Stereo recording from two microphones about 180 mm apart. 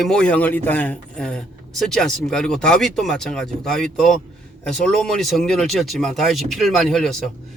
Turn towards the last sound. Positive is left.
turn(degrees=0)  # may be behind; listen again after turning